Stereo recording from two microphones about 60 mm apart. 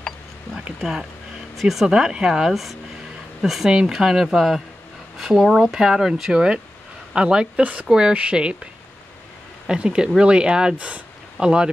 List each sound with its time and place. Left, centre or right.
1.6 s speech: centre
2.5 s speech: centre
9.7 s speech: centre